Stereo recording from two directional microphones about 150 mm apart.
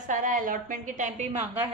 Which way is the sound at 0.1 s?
60° right (ahead or behind).